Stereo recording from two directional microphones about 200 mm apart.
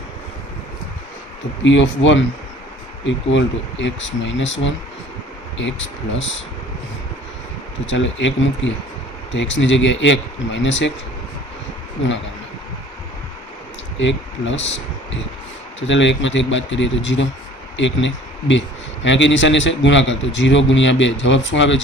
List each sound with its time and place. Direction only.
1.6 s a man's voice: 65° left (ahead or behind)
7.9 s a man's voice: 70° left (ahead or behind)
14.0 s a man's voice: 65° left (ahead or behind)